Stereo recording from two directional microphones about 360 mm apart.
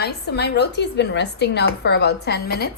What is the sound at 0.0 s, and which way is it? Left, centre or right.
A woman's voice, left.